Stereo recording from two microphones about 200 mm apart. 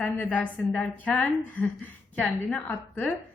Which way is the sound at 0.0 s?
10° left (ahead or behind).